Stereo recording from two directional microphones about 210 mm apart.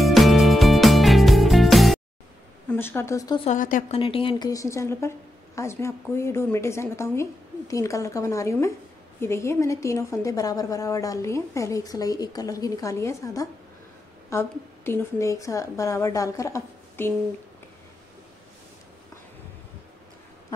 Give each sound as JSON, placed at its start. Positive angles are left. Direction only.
{"t": 0.0, "sound": "music", "side_deg": 0}
{"t": 2.7, "sound": "a woman's voice", "side_deg": 10}
{"t": 3.4, "sound": "a woman's voice", "side_deg": 40}
{"t": 4.0, "sound": "a woman's voice", "side_deg": 25}